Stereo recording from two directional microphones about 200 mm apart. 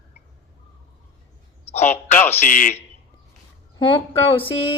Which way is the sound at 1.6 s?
35° left (ahead or behind).